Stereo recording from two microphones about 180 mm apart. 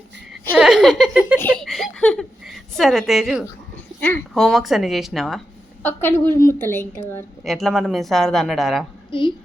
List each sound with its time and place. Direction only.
0.5 s a woman's voice: 5° right (ahead or behind)
1.4 s a woman's voice: 5° left (ahead or behind)
5.8 s a woman's voice: 10° left (ahead or behind)
7.4 s a woman's voice: centre (ahead or behind)
9.1 s a woman's voice: 30° left (ahead or behind)